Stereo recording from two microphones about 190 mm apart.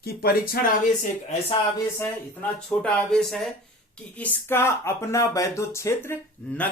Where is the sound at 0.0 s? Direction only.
55° left (ahead or behind).